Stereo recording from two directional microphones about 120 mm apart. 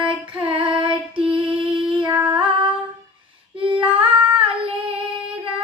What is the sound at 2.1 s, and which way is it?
Female singing, 15° right (ahead or behind).